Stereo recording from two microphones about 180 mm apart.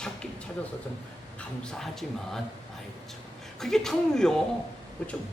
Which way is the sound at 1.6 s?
Centre (ahead or behind).